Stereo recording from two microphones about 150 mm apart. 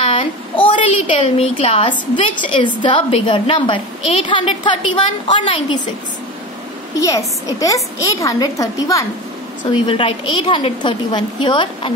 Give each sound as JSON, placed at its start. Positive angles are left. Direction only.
{"t": 0.0, "sound": "a woman's voice", "side_deg": 35}
{"t": 7.0, "sound": "a woman's voice", "side_deg": 20}
{"t": 9.7, "sound": "a woman's voice", "side_deg": 35}